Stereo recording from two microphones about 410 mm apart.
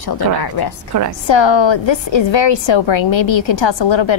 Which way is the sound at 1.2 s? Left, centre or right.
Left.